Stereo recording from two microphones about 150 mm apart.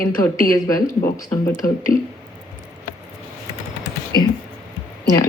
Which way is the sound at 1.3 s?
25° left (ahead or behind).